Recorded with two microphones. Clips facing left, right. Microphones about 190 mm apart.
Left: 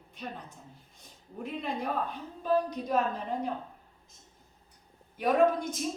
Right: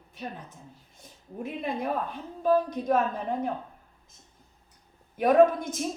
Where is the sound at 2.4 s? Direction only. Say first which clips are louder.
Right 4 dB; 50° right (ahead or behind).